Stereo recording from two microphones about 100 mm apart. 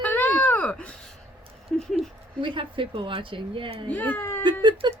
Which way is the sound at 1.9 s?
55° right (ahead or behind).